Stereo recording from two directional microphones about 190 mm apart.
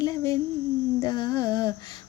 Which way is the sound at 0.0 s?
20° left (ahead or behind).